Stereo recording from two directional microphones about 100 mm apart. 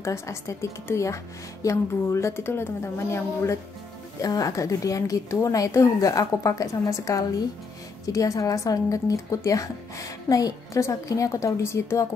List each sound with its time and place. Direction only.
0.0 s speech: 30° left (ahead or behind)